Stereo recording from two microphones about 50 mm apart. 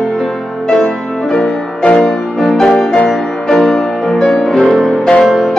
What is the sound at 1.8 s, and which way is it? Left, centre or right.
Music, left.